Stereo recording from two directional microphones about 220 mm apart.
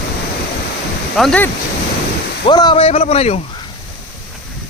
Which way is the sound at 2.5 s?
20° left (ahead or behind).